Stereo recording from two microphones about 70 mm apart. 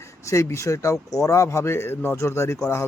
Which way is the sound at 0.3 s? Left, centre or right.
Left.